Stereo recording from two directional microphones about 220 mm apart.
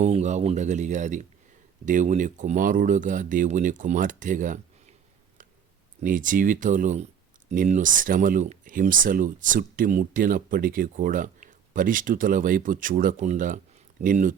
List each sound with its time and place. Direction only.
0.0 s speech: 30° right (ahead or behind)
6.0 s speech: 35° right (ahead or behind)